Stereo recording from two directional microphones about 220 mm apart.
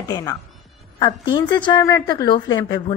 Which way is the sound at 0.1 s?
15° left (ahead or behind).